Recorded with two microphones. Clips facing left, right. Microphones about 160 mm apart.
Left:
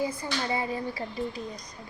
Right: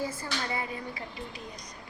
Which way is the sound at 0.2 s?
25° left (ahead or behind).